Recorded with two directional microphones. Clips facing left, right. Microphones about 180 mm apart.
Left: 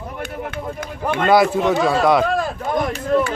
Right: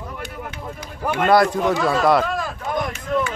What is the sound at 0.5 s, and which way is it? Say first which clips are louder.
Run: left 6 dB; 55° left (ahead or behind).